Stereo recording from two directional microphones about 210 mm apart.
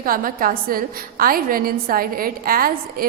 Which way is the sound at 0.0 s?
40° right (ahead or behind).